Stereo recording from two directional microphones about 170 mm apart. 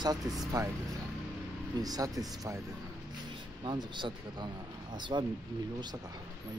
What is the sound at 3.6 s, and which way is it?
Speech, 25° right (ahead or behind).